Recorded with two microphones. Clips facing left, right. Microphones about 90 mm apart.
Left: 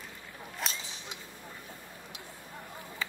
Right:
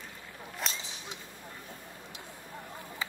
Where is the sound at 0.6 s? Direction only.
Centre (ahead or behind).